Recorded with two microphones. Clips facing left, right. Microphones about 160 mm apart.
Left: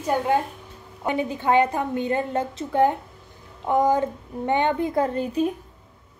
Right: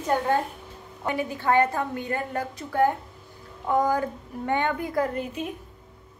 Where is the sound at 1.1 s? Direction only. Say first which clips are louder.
Left 3 dB; 20° left (ahead or behind).